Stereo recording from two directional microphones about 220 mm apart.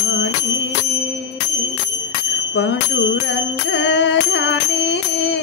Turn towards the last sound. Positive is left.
turn(degrees=50)  # may be behind; listen again after turning